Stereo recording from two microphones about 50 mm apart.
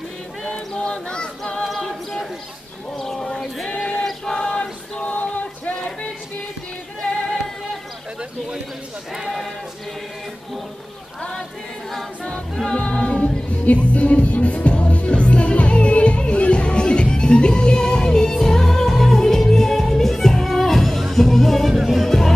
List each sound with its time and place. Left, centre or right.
0.7 s child singing: centre
1.6 s a capella: centre
3.0 s choir: centre
5.0 s a sound: left
7.0 s music: centre
9.1 s sheep: centre
11.1 s choir: centre
12.3 s music: centre
13.7 s music: left; by 22.3 s centre